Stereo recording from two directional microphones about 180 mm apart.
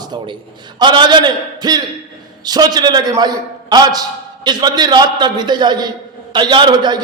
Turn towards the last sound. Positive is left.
turn(degrees=-25)  # may be behind; listen again after turning